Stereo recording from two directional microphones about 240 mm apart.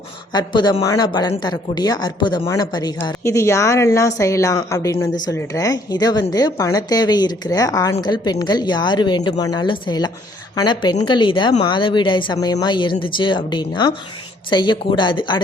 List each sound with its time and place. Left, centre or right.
0.3 s speech: centre